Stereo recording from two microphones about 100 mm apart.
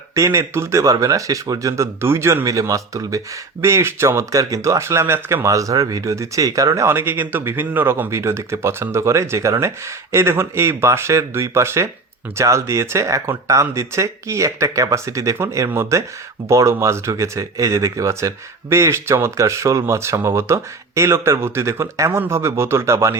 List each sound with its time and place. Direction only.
0.1 s speech: 30° right (ahead or behind)